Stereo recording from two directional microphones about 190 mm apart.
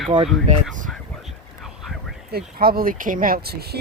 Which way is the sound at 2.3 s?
55° right (ahead or behind).